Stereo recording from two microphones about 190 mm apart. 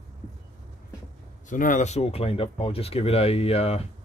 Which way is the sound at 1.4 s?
45° left (ahead or behind).